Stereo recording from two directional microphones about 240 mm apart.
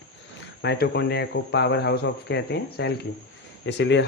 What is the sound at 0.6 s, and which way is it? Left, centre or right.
Speech, left.